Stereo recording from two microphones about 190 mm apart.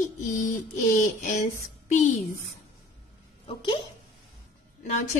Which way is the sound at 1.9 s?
40° left (ahead or behind).